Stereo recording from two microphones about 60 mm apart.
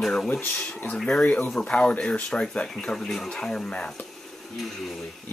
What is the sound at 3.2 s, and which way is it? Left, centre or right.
Speech, centre.